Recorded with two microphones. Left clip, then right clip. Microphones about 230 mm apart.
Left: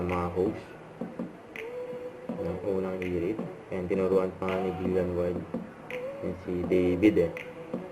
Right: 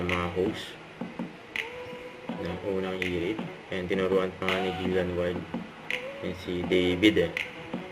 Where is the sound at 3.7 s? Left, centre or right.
Right.